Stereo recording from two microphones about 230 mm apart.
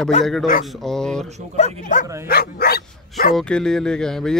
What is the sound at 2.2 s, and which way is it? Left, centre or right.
Speech, left.